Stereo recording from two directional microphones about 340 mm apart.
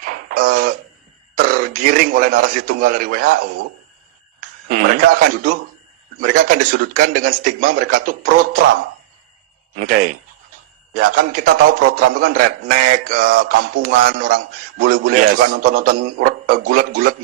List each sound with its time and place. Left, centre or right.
0.0 s a sound: right
1.4 s speech: right
4.7 s a man's voice: right
11.0 s a man's voice: right